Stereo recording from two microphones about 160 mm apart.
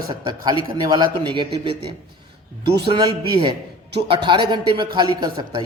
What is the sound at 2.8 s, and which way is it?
A man's voice, 30° right (ahead or behind).